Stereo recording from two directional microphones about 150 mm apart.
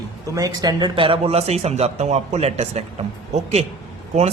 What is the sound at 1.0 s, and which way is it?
A man's voice, 40° right (ahead or behind).